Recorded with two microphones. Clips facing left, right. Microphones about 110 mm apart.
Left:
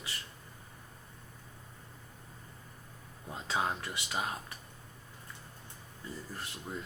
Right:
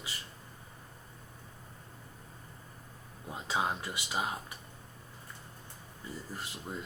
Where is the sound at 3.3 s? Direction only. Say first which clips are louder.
Right 1 dB; 15° right (ahead or behind).